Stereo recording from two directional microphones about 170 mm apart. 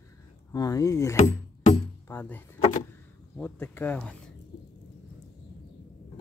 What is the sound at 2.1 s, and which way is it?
Speech, 10° left (ahead or behind).